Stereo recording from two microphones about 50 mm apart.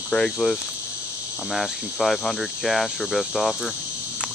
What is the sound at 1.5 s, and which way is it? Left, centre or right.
Cricket, centre.